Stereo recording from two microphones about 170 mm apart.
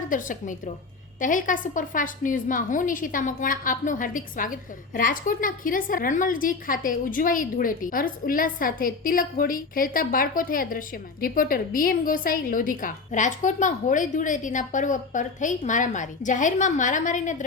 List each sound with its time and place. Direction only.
0.1 s a woman's voice: 50° left (ahead or behind)